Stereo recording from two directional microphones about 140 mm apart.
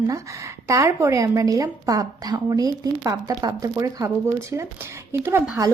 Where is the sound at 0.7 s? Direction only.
20° right (ahead or behind).